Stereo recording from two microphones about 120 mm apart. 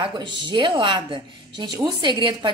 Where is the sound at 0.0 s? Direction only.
40° right (ahead or behind).